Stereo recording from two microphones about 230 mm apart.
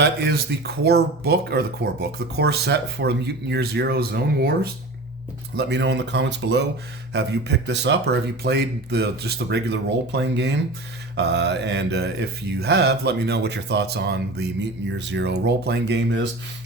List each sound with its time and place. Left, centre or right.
0.0 s mantra: right